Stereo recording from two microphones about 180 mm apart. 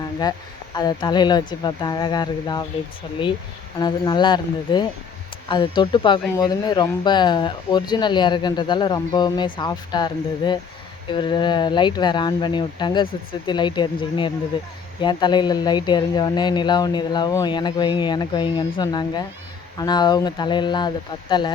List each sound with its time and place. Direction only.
0.2 s speech: 20° left (ahead or behind)
3.8 s speech: 20° left (ahead or behind)